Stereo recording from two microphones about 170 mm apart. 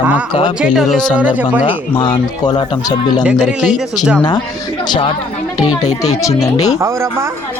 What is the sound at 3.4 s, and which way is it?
Speech, 5° right (ahead or behind).